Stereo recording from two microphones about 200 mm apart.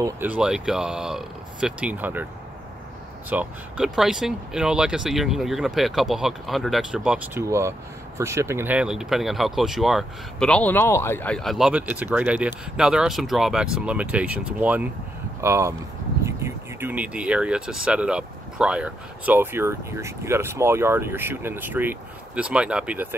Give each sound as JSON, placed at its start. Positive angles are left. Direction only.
{"t": 0.0, "sound": "speech", "side_deg": -10}
{"t": 3.3, "sound": "speech", "side_deg": -5}